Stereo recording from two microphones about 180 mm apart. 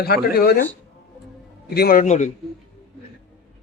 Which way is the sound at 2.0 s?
40° left (ahead or behind).